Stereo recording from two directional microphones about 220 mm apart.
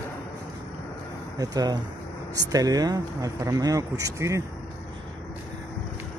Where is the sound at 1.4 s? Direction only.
20° right (ahead or behind).